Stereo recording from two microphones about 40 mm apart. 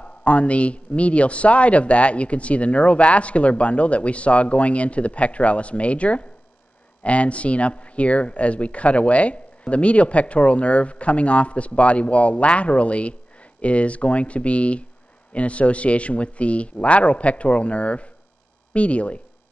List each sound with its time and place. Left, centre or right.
0.0 s speech: left